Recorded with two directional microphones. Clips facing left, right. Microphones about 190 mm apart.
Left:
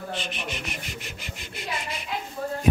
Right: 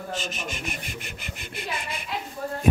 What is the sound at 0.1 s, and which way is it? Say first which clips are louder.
Speech: right 1 dB; 45° right (ahead or behind).